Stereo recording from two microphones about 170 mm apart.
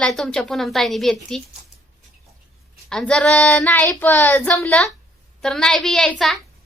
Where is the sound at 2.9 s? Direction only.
5° left (ahead or behind).